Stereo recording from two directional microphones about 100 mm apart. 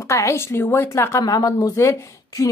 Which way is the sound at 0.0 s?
30° left (ahead or behind).